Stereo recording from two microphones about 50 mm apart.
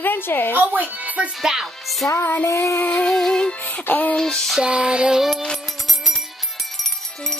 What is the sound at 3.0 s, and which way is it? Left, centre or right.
Music, centre.